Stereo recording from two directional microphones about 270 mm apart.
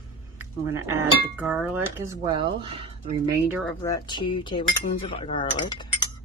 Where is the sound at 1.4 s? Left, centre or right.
Centre.